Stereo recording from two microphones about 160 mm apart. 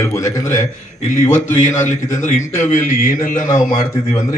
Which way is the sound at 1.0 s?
50° left (ahead or behind).